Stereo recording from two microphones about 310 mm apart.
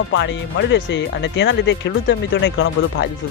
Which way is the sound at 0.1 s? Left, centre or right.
Left.